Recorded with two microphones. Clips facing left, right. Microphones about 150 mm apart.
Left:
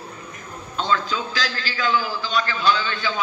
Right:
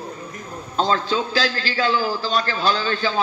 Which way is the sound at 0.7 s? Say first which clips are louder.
Right 3 dB; 35° right (ahead or behind).